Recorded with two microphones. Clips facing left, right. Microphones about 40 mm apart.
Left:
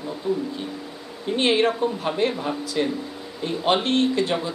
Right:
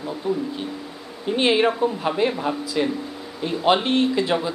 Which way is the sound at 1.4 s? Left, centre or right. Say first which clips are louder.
Right 1 dB; centre.